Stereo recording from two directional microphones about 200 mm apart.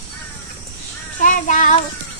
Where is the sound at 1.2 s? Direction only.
40° left (ahead or behind).